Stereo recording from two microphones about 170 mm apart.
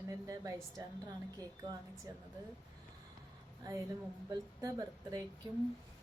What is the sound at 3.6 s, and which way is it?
Speech, 20° right (ahead or behind).